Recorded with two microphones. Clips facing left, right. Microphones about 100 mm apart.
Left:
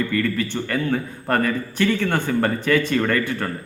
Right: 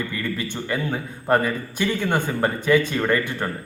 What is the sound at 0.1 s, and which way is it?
A man's voice, 15° right (ahead or behind).